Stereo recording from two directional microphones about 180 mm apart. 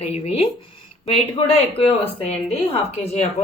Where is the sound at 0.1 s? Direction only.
35° left (ahead or behind).